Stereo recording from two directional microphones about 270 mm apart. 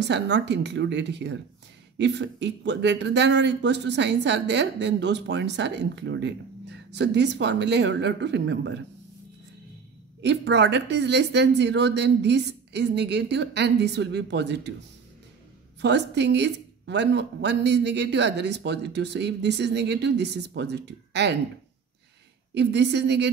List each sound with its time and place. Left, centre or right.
0.0 s speech: right
10.2 s speech: right
15.8 s speech: right
22.5 s speech: right